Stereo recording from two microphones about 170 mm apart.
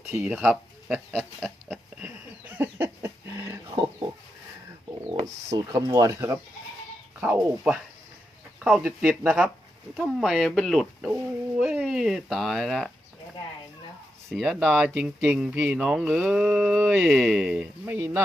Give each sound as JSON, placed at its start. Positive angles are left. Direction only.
{"t": 0.1, "sound": "speech", "side_deg": -5}
{"t": 1.1, "sound": "pig", "side_deg": 0}
{"t": 5.2, "sound": "speech", "side_deg": -20}
{"t": 8.5, "sound": "a sound", "side_deg": -5}
{"t": 8.8, "sound": "speech", "side_deg": -5}
{"t": 14.3, "sound": "speech", "side_deg": 0}